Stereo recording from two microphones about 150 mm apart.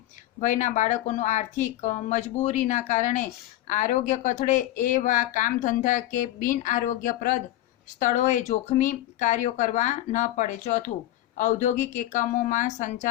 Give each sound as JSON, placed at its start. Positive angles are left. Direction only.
{"t": 0.3, "sound": "speech", "side_deg": 55}